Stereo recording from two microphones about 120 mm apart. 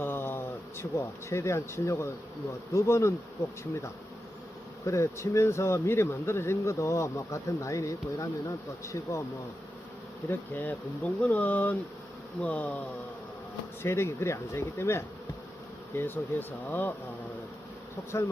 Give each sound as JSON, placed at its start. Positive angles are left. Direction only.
{"t": 0.0, "sound": "speech", "side_deg": 20}
{"t": 10.2, "sound": "speech", "side_deg": 15}
{"t": 13.8, "sound": "speech", "side_deg": 20}